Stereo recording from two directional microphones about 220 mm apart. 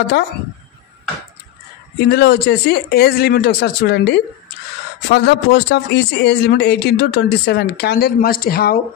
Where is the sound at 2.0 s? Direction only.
50° left (ahead or behind).